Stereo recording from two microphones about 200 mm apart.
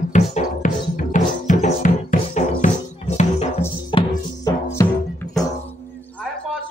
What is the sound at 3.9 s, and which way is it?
Music, 25° left (ahead or behind).